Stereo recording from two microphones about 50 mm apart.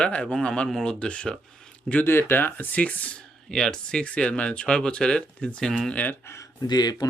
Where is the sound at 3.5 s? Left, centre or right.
Centre.